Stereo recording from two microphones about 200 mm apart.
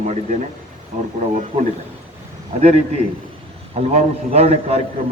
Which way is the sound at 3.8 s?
35° right (ahead or behind).